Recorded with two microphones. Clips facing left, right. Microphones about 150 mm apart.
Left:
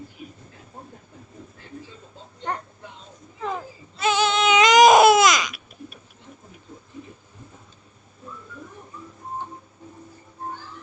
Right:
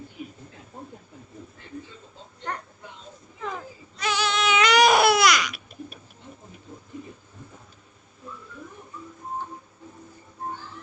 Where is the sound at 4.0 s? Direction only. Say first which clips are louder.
Left 5 dB; 25° left (ahead or behind).